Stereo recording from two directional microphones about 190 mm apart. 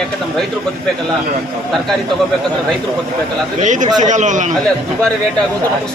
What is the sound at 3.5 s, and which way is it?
Speech, 40° right (ahead or behind).